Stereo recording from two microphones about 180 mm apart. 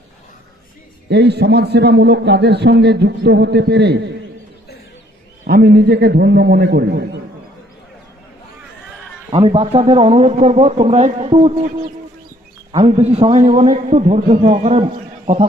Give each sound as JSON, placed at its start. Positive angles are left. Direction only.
{"t": 1.0, "sound": "a man's voice", "side_deg": -70}
{"t": 5.4, "sound": "a man's voice", "side_deg": -60}
{"t": 9.3, "sound": "a man's voice", "side_deg": -30}
{"t": 12.7, "sound": "a man's voice", "side_deg": -35}